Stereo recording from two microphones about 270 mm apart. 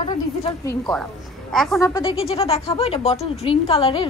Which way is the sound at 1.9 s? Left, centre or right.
Centre.